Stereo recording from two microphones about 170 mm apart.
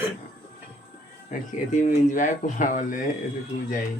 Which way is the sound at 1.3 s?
50° left (ahead or behind).